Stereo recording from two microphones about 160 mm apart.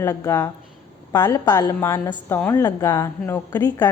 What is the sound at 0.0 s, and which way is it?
A woman's voice, 20° left (ahead or behind).